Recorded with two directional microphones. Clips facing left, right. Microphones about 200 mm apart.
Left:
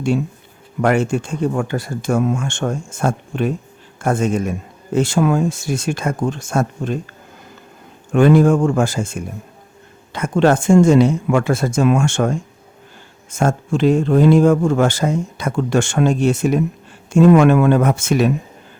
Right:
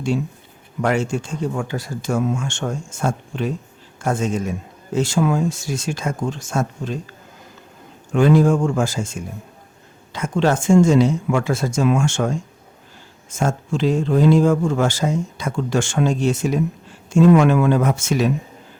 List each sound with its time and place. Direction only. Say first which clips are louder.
0.8 s speech: left 4 dB; 55° left (ahead or behind)
8.1 s speech: left 3 dB; 60° left (ahead or behind)